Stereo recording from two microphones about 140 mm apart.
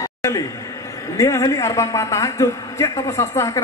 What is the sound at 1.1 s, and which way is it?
A man's voice, 25° left (ahead or behind).